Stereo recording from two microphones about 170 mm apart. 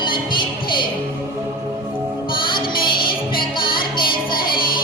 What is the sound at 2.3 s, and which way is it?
Music, 25° left (ahead or behind).